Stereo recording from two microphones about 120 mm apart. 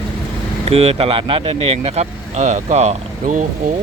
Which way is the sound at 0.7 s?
55° right (ahead or behind).